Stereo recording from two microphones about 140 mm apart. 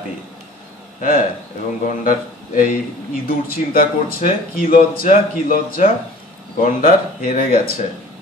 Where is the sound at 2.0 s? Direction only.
80° left.